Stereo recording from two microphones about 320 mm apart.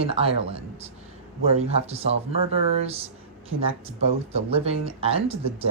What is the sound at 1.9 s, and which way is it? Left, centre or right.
Speech, centre.